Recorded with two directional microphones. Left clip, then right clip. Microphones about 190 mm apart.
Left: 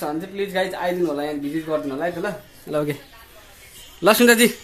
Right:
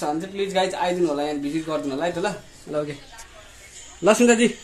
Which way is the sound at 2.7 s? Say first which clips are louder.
Left 3 dB; 40° left (ahead or behind).